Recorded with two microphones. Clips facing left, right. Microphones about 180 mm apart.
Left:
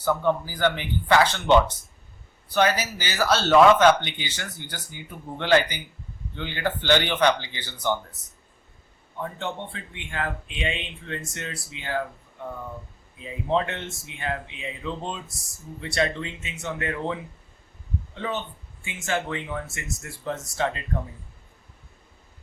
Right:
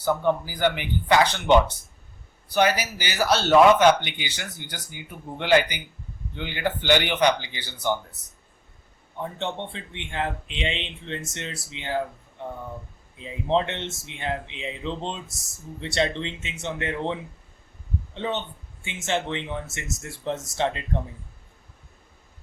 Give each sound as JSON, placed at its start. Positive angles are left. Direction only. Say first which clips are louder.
{"t": 0.0, "sound": "speech", "louder": "even", "side_deg": -15}
{"t": 9.2, "sound": "speech", "louder": "right 1 dB", "side_deg": -25}